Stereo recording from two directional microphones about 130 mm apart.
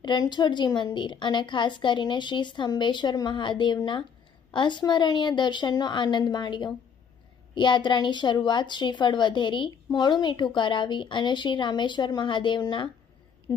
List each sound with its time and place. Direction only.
0.0 s a woman's voice: 35° left (ahead or behind)